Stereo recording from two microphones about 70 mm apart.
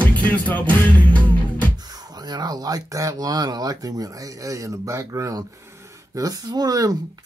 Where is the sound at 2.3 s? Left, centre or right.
Right.